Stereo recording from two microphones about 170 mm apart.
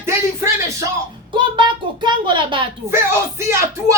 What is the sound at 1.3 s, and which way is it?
A child's voice, 30° right (ahead or behind).